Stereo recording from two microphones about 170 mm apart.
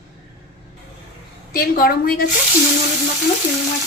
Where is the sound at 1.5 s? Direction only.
60° left (ahead or behind).